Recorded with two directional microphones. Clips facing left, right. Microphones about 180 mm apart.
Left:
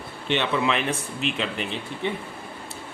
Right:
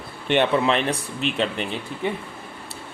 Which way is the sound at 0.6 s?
35° right (ahead or behind).